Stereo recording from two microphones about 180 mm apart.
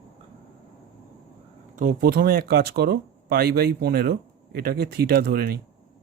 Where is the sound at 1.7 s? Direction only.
50° right (ahead or behind).